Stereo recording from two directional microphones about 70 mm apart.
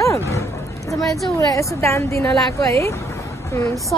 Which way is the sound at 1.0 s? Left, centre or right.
Centre.